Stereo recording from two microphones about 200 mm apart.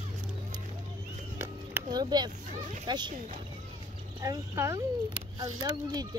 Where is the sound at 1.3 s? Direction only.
15° right (ahead or behind).